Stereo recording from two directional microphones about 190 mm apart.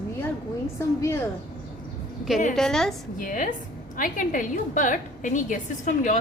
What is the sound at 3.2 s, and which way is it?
A woman's voice, 45° left (ahead or behind).